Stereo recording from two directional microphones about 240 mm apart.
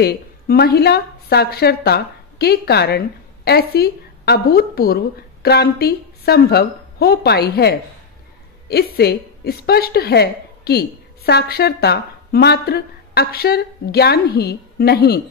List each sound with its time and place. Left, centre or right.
0.0 s a woman's voice: left